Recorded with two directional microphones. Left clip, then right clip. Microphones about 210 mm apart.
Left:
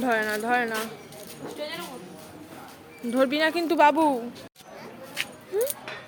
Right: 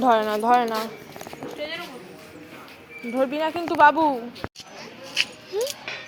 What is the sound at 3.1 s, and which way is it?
Speech, 25° left (ahead or behind).